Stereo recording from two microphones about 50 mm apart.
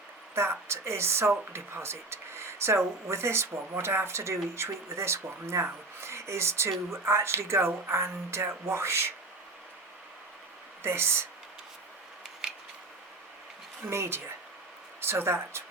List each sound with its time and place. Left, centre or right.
0.7 s speech: right
10.8 s speech: right
13.8 s speech: right